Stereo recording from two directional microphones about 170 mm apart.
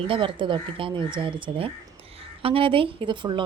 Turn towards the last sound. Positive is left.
turn(degrees=-30)  # may be behind; listen again after turning